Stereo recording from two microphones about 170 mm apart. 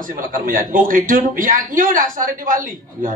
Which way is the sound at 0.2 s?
55° right (ahead or behind).